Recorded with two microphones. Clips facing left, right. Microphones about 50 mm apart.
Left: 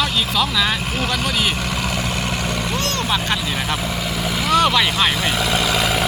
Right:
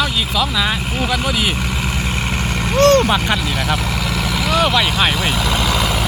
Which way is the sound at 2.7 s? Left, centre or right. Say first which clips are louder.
Right 11 dB; right.